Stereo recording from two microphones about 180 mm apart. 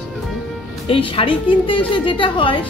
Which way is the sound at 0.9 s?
30° left (ahead or behind).